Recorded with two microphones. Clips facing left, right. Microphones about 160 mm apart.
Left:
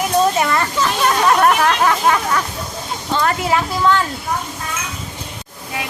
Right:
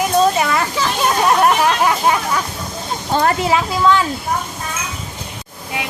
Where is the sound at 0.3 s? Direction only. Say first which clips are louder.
Even; 5° right (ahead or behind).